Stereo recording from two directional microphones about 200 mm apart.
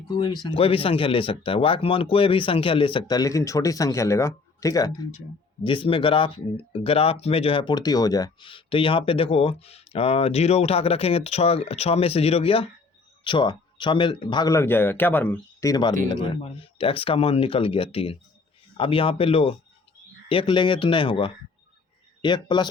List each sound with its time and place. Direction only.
0.1 s speech: 20° left (ahead or behind)
15.7 s speech: 20° left (ahead or behind)